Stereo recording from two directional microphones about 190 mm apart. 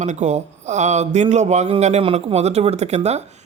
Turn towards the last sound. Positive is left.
turn(degrees=-35)  # may be behind; listen again after turning